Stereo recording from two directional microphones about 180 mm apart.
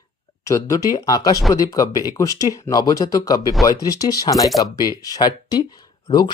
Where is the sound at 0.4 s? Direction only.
15° left (ahead or behind).